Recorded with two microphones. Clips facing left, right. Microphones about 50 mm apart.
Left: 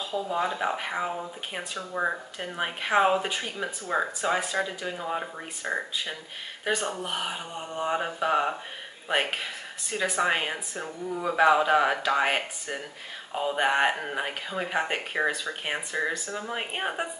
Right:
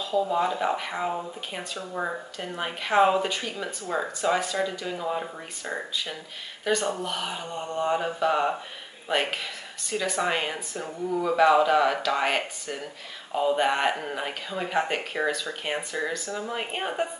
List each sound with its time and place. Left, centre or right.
0.1 s speech: centre
5.6 s speech: left
7.5 s speech: centre